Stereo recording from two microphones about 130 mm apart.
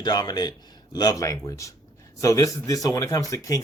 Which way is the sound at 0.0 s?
30° left (ahead or behind).